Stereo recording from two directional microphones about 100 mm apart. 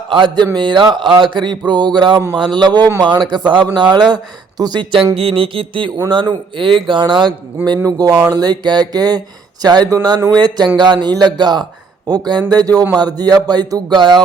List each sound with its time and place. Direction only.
0.1 s speech: 55° right (ahead or behind)
5.1 s mantra: 65° right (ahead or behind)
6.1 s speech: 50° right (ahead or behind)
7.9 s a sound: 40° right (ahead or behind)
8.3 s speech: 40° right (ahead or behind)
10.3 s speech: 50° right (ahead or behind)
12.0 s a sound: 45° right (ahead or behind)